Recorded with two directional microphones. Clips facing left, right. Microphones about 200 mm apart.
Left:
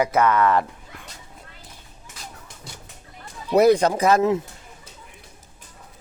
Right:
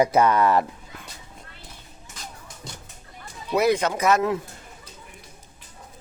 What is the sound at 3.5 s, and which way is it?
Speech, 35° left (ahead or behind).